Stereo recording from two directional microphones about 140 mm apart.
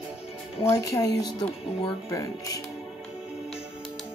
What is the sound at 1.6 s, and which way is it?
Speech, 40° left (ahead or behind).